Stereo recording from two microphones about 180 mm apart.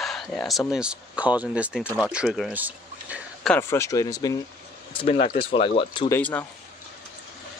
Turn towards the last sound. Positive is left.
turn(degrees=10)  # may be behind; listen again after turning